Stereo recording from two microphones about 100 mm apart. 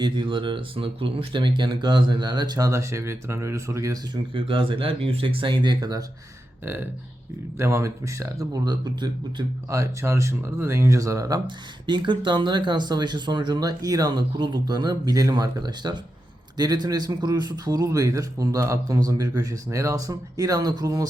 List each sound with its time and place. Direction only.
0.0 s speech: 55° right (ahead or behind); by 3.9 s 30° right (ahead or behind)
4.1 s speech: 60° right (ahead or behind)
7.6 s a man's voice: 30° right (ahead or behind); by 9.0 s 45° right (ahead or behind)
9.6 s a man's voice: 30° right (ahead or behind)
11.4 s a man's voice: 50° right (ahead or behind)